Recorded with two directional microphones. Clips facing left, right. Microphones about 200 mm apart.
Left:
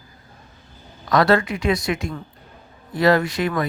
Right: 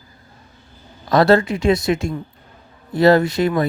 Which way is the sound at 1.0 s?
30° right (ahead or behind).